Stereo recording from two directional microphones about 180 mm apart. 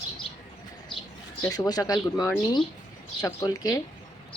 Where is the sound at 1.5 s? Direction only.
20° left (ahead or behind).